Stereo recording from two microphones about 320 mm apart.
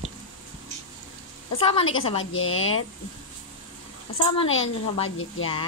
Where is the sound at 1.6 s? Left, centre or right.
Centre.